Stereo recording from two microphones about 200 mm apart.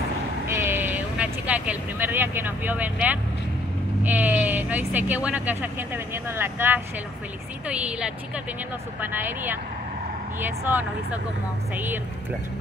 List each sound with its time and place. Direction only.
0.6 s vehicle: 10° right (ahead or behind)
4.0 s a woman's voice: 10° right (ahead or behind)